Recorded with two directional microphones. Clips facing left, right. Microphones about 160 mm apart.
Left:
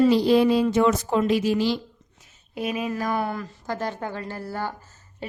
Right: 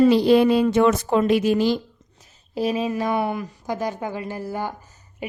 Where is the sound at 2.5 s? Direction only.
30° right (ahead or behind).